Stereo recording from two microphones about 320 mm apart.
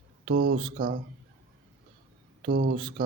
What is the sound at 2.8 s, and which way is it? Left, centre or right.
Speech, centre.